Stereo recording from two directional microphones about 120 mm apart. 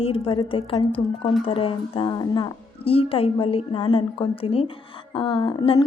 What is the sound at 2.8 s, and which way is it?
Speech, 50° left (ahead or behind).